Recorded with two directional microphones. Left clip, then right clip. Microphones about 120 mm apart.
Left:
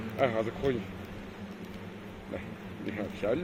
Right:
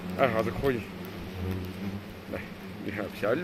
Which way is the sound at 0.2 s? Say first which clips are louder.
Right 3 dB; 20° right (ahead or behind).